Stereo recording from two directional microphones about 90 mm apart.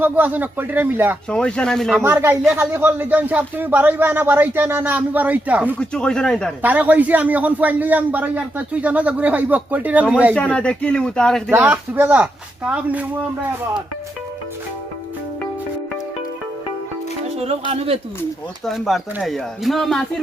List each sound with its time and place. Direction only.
0.0 s speech: 20° right (ahead or behind)
1.3 s speech: 10° left (ahead or behind)
2.0 s speech: 25° right (ahead or behind)
5.8 s speech: 10° left (ahead or behind)
6.6 s a man's voice: 15° right (ahead or behind)
10.5 s speech: 10° left (ahead or behind)
11.5 s a man's voice: 20° right (ahead or behind)
17.4 s speech: 90° right
18.6 s speech: centre (ahead or behind)